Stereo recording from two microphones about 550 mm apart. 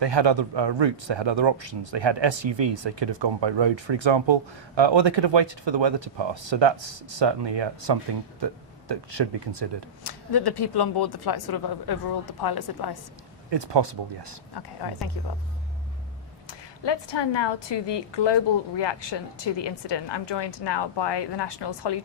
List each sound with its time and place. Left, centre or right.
0.0 s speech: right
10.0 s speech: left
13.5 s speech: right
14.5 s a woman's voice: left
16.5 s a woman's voice: left